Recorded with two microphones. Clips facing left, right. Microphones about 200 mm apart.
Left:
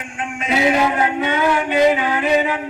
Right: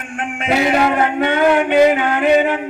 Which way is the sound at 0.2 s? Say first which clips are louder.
Right 2 dB; 60° right (ahead or behind).